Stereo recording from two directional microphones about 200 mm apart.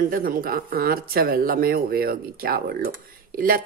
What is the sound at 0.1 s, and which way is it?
Speech, 45° right (ahead or behind).